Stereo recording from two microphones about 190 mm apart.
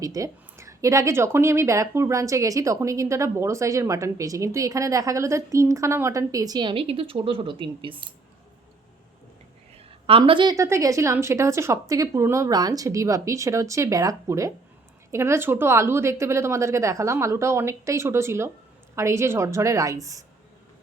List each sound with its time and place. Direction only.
0.0 s speech: 15° right (ahead or behind)
10.1 s speech: 25° right (ahead or behind)